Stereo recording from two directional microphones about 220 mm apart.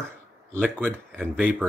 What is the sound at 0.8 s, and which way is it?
Speech, 5° left (ahead or behind).